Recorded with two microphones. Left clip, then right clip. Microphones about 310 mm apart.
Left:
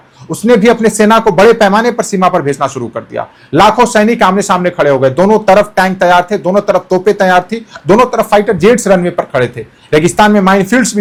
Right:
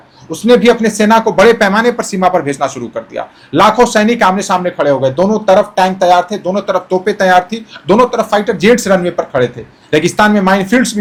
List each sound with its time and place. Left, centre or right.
0.3 s speech: left